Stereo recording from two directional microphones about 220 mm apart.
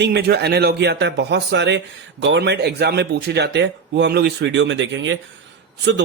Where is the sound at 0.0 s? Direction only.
45° right (ahead or behind).